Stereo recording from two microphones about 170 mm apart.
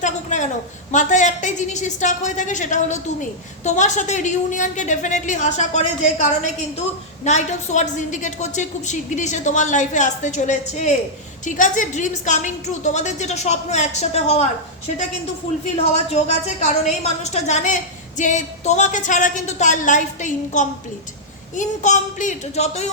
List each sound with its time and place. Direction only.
0.0 s a woman's voice: 45° left (ahead or behind)
7.3 s a woman's voice: 45° left (ahead or behind)
15.6 s a woman's voice: 40° left (ahead or behind)